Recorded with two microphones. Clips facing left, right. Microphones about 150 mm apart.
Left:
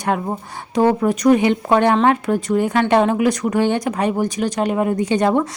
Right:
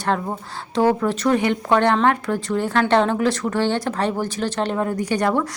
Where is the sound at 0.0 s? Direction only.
15° left (ahead or behind).